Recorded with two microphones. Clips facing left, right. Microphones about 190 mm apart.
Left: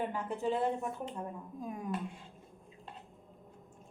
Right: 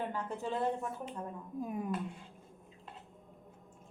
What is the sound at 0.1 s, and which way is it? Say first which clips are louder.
Speech: left 3 dB; 15° left (ahead or behind).